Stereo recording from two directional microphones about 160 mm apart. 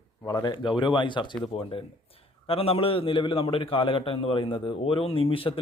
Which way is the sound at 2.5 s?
35° left (ahead or behind).